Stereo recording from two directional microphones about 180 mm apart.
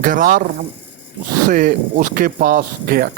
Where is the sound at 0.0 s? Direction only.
50° right (ahead or behind).